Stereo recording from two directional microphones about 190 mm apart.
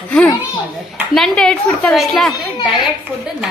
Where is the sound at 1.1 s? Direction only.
5° left (ahead or behind).